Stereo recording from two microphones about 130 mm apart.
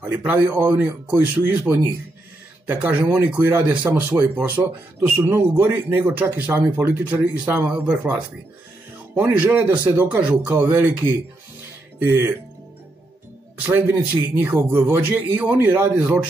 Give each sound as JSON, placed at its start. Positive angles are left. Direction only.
{"t": 0.2, "sound": "speech", "side_deg": -10}
{"t": 12.0, "sound": "speech", "side_deg": -15}
{"t": 13.6, "sound": "speech", "side_deg": -10}